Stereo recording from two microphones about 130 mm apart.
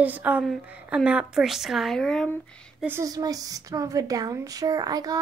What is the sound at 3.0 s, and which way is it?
Speech, 30° right (ahead or behind).